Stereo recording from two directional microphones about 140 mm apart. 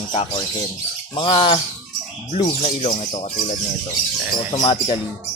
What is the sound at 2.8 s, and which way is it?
Speech, 50° left (ahead or behind).